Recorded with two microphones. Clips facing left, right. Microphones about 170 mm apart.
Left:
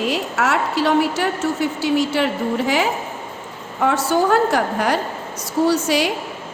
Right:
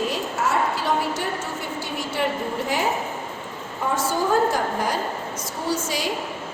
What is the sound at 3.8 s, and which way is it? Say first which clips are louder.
A woman's voice: left 6 dB; 75° left (ahead or behind).